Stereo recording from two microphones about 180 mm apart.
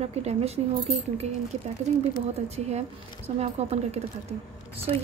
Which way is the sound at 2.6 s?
35° right (ahead or behind).